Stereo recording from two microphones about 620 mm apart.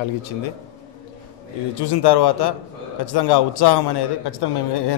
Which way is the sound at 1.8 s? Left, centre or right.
Left.